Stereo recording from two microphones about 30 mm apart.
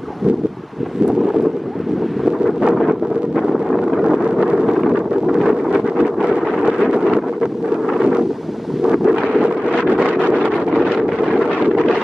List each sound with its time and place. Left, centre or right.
2.7 s wind noise: centre
5.7 s wind noise: right
9.0 s wind noise: centre
11.6 s wind noise: centre